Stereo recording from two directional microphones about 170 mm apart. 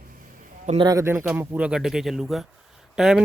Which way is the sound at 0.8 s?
20° right (ahead or behind).